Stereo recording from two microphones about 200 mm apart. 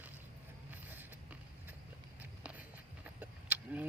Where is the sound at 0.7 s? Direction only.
10° right (ahead or behind).